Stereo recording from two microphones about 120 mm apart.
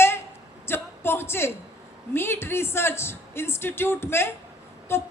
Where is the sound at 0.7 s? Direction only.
20° left (ahead or behind).